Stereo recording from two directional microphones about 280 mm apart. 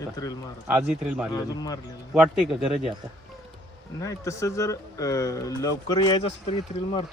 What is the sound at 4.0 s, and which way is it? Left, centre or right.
Speech, centre.